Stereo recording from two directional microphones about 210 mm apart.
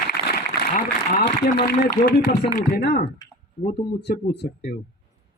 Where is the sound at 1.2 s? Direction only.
50° left (ahead or behind).